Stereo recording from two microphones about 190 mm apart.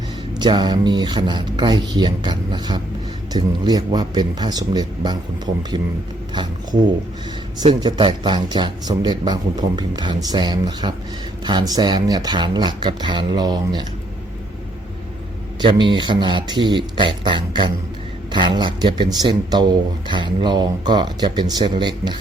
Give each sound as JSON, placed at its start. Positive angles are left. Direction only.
{"t": 0.3, "sound": "speech", "side_deg": -20}
{"t": 6.3, "sound": "speech", "side_deg": -25}
{"t": 15.6, "sound": "speech", "side_deg": -25}